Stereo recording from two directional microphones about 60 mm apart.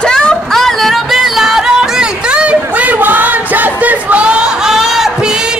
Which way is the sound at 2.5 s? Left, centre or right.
Right.